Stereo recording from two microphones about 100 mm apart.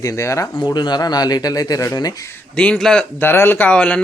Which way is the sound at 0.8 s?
45° left (ahead or behind).